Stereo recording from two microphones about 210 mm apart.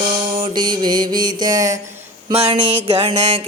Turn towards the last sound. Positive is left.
turn(degrees=-25)  # may be behind; listen again after turning